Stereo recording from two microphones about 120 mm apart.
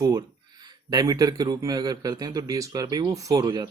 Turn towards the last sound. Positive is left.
turn(degrees=-35)  # may be behind; listen again after turning